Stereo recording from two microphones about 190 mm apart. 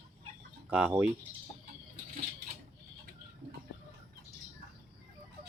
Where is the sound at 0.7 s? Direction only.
10° right (ahead or behind).